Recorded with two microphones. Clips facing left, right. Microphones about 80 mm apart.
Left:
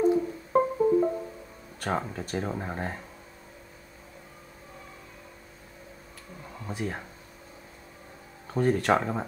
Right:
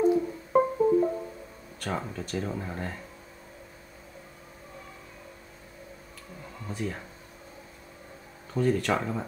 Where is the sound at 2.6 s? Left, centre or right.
Left.